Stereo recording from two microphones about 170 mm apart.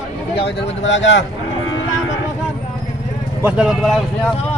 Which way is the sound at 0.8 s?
90° left.